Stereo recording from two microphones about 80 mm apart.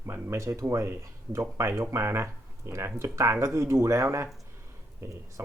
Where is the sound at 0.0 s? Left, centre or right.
Right.